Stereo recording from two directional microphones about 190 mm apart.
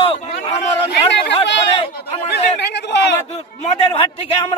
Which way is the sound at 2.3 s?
60° left (ahead or behind).